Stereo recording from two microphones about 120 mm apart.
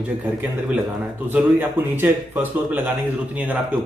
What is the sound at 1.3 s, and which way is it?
A man's voice, 15° right (ahead or behind).